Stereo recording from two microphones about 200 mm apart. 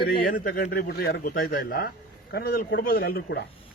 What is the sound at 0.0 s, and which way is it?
Speech, 45° left (ahead or behind).